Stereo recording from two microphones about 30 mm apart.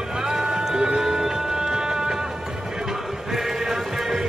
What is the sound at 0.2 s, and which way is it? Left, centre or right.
Music, centre.